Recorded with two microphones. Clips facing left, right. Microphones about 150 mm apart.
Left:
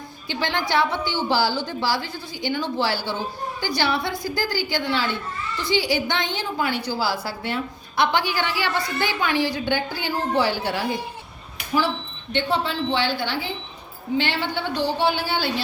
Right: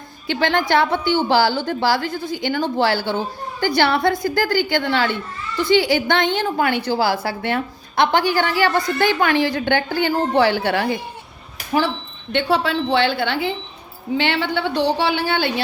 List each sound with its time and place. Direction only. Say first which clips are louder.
0.3 s a woman's voice: right 6 dB; 60° right (ahead or behind)
12.3 s a woman's voice: right 5 dB; 70° right (ahead or behind)